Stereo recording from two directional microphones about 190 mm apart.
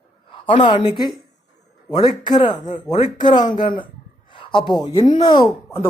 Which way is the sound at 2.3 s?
25° left (ahead or behind).